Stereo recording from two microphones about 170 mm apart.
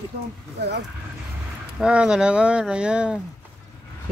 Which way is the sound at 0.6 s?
80° right.